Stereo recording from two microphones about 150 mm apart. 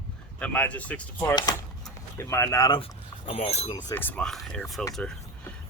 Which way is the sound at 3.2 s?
40° left (ahead or behind).